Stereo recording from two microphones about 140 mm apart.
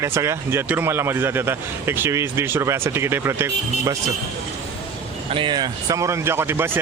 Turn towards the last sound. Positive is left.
turn(degrees=-15)  # may be behind; listen again after turning